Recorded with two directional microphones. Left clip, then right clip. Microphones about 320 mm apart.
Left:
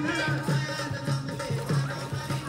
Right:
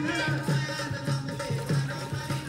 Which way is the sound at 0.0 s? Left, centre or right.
Centre.